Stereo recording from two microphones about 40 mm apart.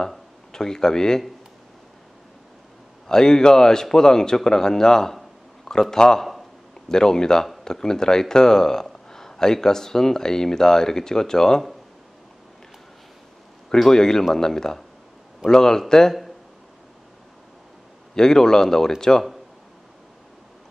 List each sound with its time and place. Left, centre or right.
0.5 s speech: centre
3.1 s speech: centre
13.7 s speech: centre
18.1 s speech: centre